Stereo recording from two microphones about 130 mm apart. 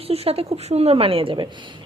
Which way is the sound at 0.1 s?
50° right (ahead or behind).